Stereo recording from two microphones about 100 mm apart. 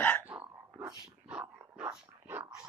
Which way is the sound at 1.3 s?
15° right (ahead or behind).